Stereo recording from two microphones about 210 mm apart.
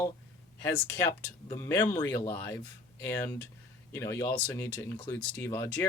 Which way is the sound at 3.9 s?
15° left (ahead or behind).